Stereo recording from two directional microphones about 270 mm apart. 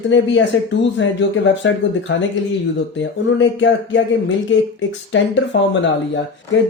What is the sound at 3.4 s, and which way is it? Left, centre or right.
Speech, left.